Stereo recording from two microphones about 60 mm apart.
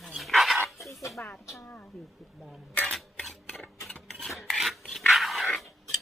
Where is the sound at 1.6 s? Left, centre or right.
Left.